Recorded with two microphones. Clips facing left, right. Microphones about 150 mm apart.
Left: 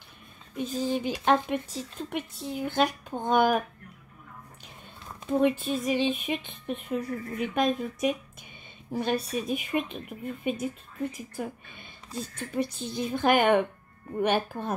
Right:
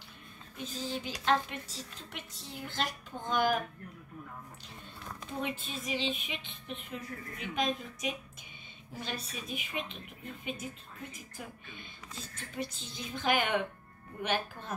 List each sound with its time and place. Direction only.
0.6 s speech: 50° left (ahead or behind)
5.4 s speech: 55° left (ahead or behind)